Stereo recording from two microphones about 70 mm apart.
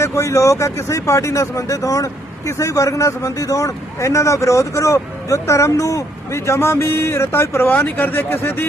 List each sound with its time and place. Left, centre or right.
0.0 s a man's voice: left